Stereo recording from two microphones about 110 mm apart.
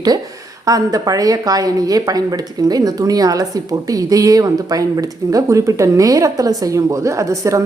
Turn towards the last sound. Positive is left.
turn(degrees=-30)  # may be behind; listen again after turning